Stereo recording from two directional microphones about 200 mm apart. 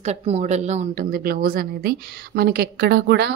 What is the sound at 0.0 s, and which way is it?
A woman's voice, 35° right (ahead or behind).